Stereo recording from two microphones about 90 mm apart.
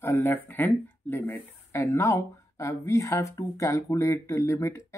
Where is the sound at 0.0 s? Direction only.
25° left (ahead or behind).